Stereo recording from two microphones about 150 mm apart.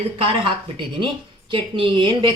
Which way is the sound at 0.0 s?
40° right (ahead or behind).